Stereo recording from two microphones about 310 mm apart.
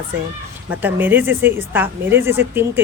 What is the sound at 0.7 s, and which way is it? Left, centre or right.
Speech, centre.